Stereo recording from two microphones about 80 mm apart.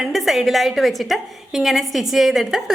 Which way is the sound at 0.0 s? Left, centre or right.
Centre.